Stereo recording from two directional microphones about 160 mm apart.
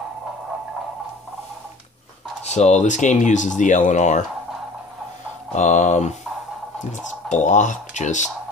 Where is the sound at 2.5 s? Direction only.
45° left (ahead or behind).